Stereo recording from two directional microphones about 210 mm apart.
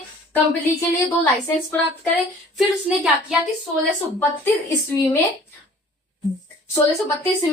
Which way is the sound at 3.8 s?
10° left (ahead or behind).